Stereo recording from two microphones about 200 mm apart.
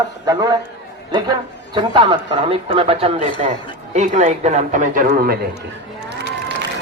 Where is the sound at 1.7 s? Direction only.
25° right (ahead or behind); by 5.3 s 45° right (ahead or behind).